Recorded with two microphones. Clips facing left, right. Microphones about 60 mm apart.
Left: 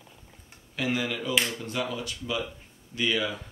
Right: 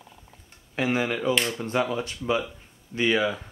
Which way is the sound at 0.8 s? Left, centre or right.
Right.